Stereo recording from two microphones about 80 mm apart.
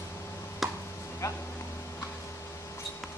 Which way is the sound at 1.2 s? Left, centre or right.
Left.